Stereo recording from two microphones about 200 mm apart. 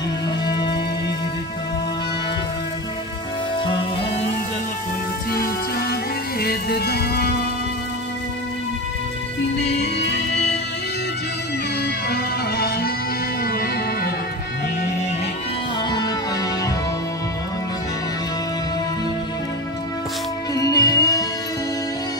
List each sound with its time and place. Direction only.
0.5 s music: 20° left (ahead or behind)
5.3 s music: 50° left (ahead or behind)
11.8 s music: 50° left (ahead or behind)
20.5 s music: 20° left (ahead or behind)